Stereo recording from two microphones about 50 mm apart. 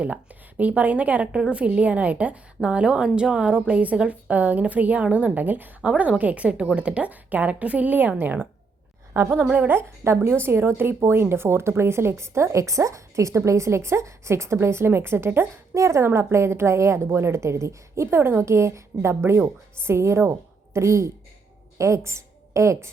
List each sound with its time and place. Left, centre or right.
0.0 s a woman's voice: right
1.3 s a woman's voice: centre
4.3 s a woman's voice: right
5.8 s a woman's voice: right
9.1 s a woman's voice: right
9.4 s a woman's voice: right
10.0 s a woman's voice: right
15.7 s speech: right
16.0 s a woman's voice: right
18.2 s speech: right
20.7 s a woman's voice: right